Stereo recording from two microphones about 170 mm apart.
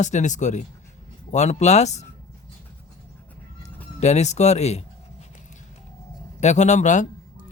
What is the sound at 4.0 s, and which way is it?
Speech, 40° left (ahead or behind).